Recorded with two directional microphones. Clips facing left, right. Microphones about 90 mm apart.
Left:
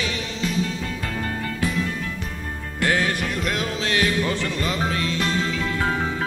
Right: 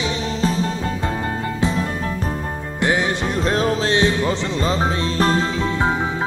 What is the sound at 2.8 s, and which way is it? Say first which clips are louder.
Music: right 2 dB; 20° right (ahead or behind).